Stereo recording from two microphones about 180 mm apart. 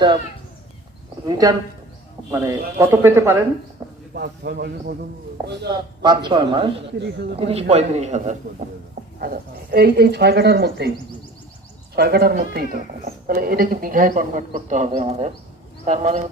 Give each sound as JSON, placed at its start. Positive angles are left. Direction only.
{"t": 1.3, "sound": "a man's voice", "side_deg": -20}
{"t": 4.1, "sound": "speech", "side_deg": -60}
{"t": 6.0, "sound": "a man's voice", "side_deg": -25}
{"t": 9.1, "sound": "speech", "side_deg": -55}
{"t": 11.9, "sound": "a man's voice", "side_deg": -60}